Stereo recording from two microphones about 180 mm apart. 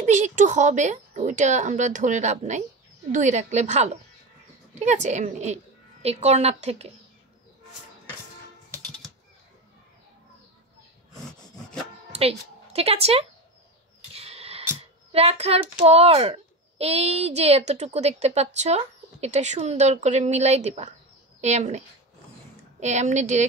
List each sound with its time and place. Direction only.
0.0 s a child's voice: 40° right (ahead or behind)
11.2 s wood: 5° left (ahead or behind)
12.1 s speech: 35° right (ahead or behind)
14.1 s music: 35° right (ahead or behind)
15.1 s a child's voice: 35° right (ahead or behind)